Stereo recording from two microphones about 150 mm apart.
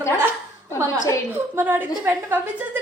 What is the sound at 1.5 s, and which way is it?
A woman's voice, 15° right (ahead or behind).